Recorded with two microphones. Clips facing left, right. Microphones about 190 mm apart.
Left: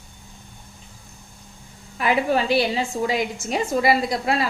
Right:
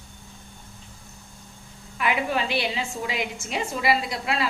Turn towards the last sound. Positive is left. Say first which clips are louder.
# left 5 dB
turn(degrees=40)  # may be behind; listen again after turning